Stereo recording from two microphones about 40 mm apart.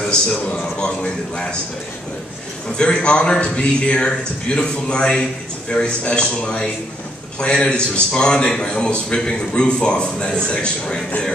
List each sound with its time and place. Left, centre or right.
0.7 s a man's voice: centre
2.8 s a man's voice: left